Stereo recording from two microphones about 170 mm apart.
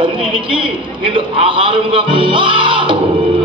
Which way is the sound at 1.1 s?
30° right (ahead or behind).